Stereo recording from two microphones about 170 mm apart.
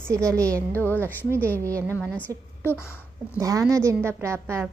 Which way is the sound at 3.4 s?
20° right (ahead or behind).